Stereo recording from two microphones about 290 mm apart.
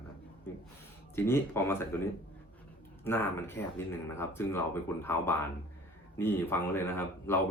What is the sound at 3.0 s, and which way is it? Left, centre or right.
Speech, centre.